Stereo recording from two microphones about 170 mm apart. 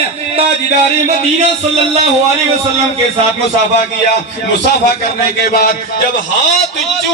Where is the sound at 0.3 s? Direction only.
40° right (ahead or behind).